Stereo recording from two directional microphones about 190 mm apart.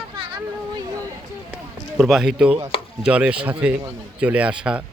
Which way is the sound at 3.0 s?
5° right (ahead or behind).